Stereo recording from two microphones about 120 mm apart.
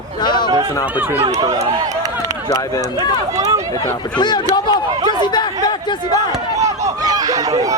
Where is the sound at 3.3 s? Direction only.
25° right (ahead or behind).